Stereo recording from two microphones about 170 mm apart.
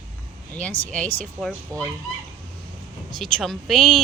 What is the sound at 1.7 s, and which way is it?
Speech, 20° right (ahead or behind).